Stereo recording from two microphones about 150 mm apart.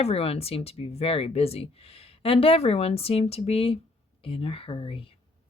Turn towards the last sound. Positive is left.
turn(degrees=35)  # may be behind; listen again after turning